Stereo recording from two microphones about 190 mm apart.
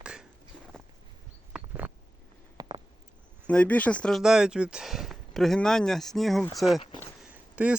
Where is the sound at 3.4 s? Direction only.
5° left (ahead or behind).